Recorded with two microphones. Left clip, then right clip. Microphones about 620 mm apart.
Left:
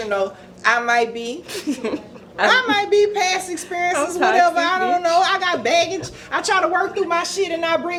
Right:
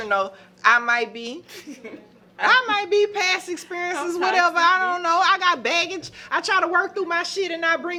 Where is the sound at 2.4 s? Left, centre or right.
Right.